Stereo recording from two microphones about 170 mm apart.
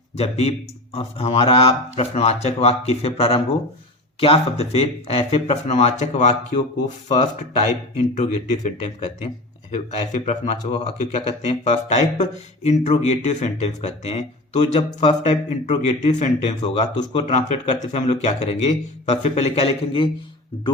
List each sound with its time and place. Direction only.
0.2 s speech: 40° left (ahead or behind)
9.7 s speech: 45° left (ahead or behind)